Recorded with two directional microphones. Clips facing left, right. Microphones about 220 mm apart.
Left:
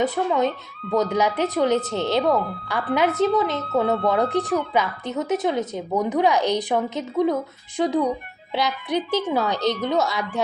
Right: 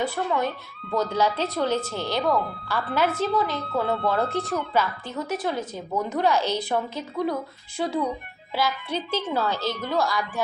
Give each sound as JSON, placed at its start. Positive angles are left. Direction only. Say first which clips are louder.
{"t": 0.0, "sound": "a woman's voice", "louder": "left 4 dB", "side_deg": 20}